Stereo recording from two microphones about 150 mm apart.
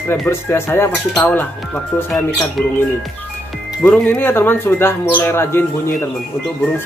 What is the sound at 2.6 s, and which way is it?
Speech, 5° left (ahead or behind).